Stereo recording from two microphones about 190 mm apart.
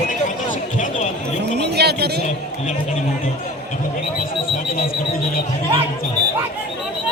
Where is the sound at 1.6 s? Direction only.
60° right (ahead or behind).